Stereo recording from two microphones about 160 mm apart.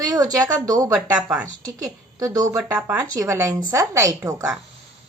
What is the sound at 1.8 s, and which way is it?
Speech, 20° right (ahead or behind).